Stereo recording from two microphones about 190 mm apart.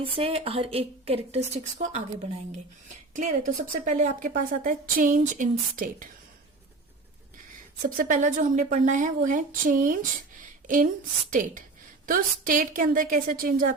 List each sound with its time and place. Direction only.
0.0 s a woman's voice: 30° right (ahead or behind)
3.1 s speech: 40° right (ahead or behind)
7.9 s speech: 45° right (ahead or behind)
11.3 s speech: 45° right (ahead or behind)